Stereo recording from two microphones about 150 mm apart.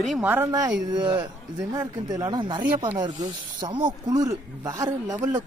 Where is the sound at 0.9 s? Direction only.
25° right (ahead or behind).